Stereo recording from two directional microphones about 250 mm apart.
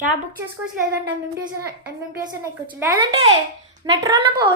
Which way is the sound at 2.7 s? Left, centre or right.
Centre.